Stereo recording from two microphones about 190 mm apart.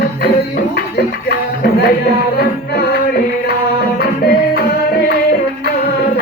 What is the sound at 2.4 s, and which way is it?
Music, 55° left (ahead or behind).